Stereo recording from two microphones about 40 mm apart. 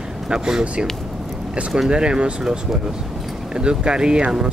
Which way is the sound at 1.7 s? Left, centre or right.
Right.